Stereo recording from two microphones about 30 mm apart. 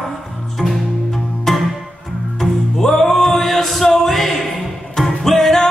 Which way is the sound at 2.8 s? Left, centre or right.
Centre.